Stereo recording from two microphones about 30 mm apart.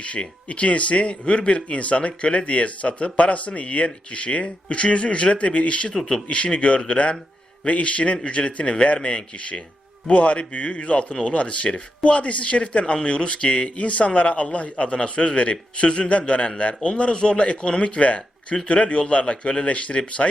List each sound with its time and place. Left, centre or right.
0.0 s a man's voice: left
16.0 s speech: left
17.1 s a man's voice: left
17.3 s a man's voice: left